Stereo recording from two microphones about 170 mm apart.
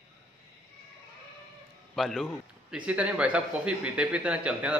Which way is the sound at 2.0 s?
Centre (ahead or behind).